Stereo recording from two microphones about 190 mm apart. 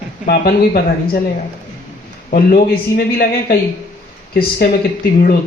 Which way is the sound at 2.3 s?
50° left (ahead or behind).